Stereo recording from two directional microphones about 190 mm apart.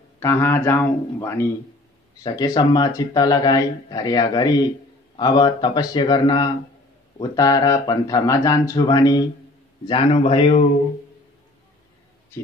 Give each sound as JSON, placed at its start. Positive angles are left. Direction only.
{"t": 0.2, "sound": "speech", "side_deg": 15}